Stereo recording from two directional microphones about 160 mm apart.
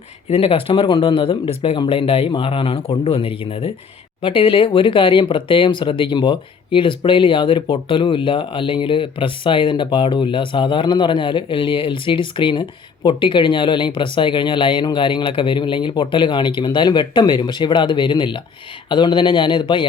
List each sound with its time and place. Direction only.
0.3 s a man's voice: 35° left (ahead or behind)